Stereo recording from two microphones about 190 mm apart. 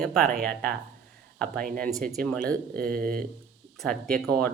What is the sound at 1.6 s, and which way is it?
Speech, 45° right (ahead or behind).